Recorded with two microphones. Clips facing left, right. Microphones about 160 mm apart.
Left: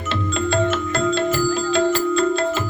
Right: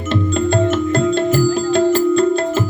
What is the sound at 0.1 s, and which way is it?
Music, 50° right (ahead or behind).